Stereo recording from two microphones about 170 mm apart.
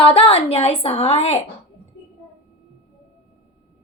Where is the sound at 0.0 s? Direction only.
30° left (ahead or behind).